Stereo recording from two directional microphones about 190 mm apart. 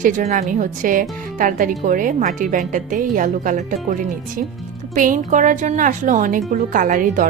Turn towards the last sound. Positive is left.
turn(degrees=-45)  # may be behind; listen again after turning